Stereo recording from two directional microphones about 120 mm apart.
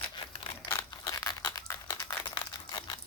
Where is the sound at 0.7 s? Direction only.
30° left (ahead or behind).